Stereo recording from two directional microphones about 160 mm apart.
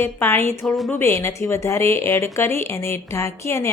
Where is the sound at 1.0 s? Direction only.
15° left (ahead or behind).